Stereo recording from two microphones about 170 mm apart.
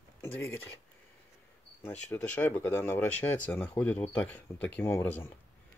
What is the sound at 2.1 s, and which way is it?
Speech, 10° left (ahead or behind).